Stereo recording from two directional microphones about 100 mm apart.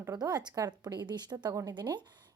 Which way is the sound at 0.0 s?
40° right (ahead or behind).